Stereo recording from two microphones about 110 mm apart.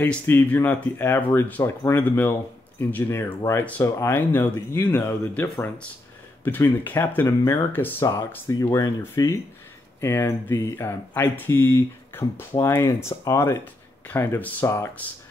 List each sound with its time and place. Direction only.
0.0 s speech: 15° left (ahead or behind)
3.6 s speech: 15° left (ahead or behind)